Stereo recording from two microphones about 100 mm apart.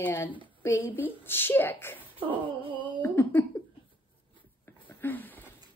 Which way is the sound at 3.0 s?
20° left (ahead or behind).